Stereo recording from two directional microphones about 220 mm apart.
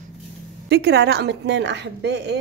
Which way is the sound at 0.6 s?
50° right (ahead or behind).